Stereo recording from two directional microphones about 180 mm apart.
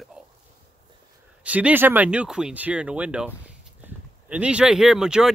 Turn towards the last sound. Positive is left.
turn(degrees=-5)  # may be behind; listen again after turning